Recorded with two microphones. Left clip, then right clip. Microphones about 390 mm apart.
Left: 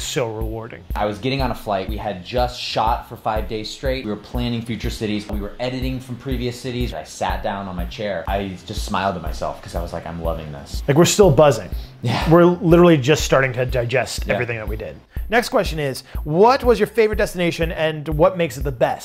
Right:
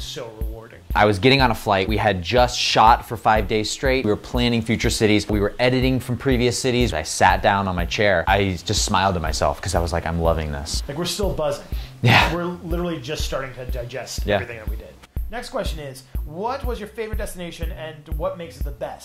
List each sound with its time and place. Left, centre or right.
0.2 s speech: left
0.9 s speech: right
5.4 s speech: right
10.9 s speech: left
12.0 s speech: right
12.4 s speech: left
15.3 s speech: left